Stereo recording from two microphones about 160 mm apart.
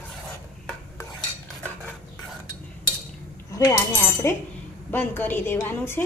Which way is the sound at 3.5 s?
20° left (ahead or behind).